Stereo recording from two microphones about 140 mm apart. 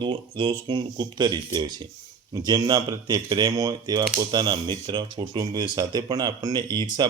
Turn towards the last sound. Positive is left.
turn(degrees=-30)  # may be behind; listen again after turning